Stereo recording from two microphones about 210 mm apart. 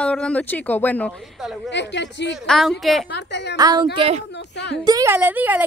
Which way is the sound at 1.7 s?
55° left (ahead or behind).